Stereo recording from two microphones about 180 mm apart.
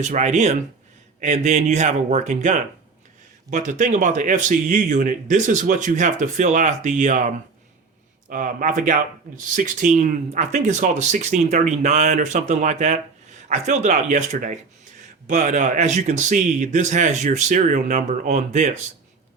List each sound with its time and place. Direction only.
0.0 s speech: 40° right (ahead or behind)